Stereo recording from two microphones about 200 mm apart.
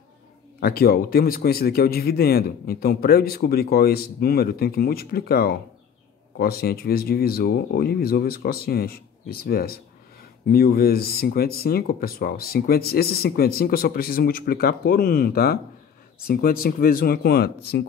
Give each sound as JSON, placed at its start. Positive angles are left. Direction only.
{"t": 0.6, "sound": "speech", "side_deg": 50}